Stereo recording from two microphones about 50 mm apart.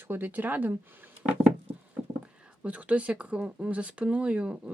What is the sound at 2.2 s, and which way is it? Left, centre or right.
Speech, right.